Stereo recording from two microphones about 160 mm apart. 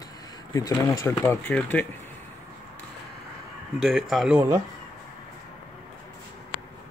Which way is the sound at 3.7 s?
Centre (ahead or behind).